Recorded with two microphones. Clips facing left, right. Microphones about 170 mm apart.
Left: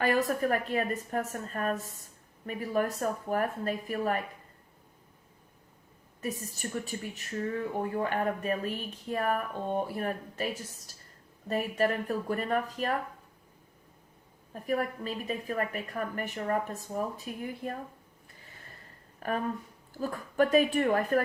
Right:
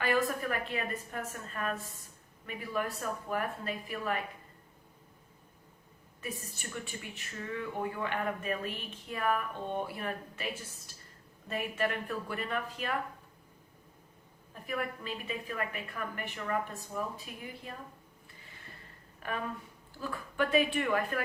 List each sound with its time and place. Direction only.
0.0 s a woman's voice: 40° left (ahead or behind)
6.2 s speech: 40° left (ahead or behind)
14.5 s speech: 40° left (ahead or behind)
19.2 s a woman's voice: 45° left (ahead or behind)